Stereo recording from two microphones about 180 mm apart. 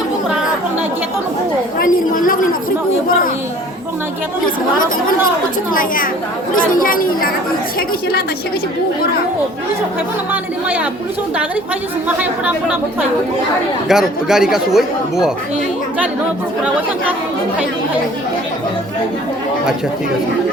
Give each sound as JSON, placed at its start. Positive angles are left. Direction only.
{"t": 1.8, "sound": "a woman's voice", "side_deg": 50}
{"t": 5.7, "sound": "speech", "side_deg": 50}
{"t": 12.0, "sound": "speech", "side_deg": -10}